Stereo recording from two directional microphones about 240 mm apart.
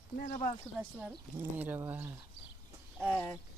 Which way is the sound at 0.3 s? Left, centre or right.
Left.